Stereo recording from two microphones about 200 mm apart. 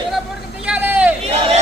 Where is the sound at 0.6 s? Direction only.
5° right (ahead or behind).